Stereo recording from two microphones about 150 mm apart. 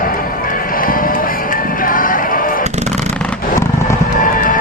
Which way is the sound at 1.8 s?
70° left (ahead or behind).